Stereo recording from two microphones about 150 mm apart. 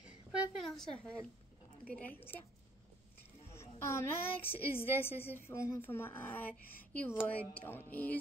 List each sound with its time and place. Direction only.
0.3 s a sound: 5° right (ahead or behind)
0.9 s speech: 10° left (ahead or behind)
3.5 s a woman's voice: 15° left (ahead or behind)